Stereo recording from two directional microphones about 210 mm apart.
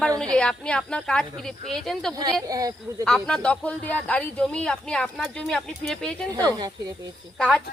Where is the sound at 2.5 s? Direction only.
15° right (ahead or behind).